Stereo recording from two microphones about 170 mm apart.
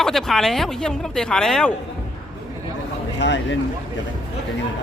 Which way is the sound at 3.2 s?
90° left.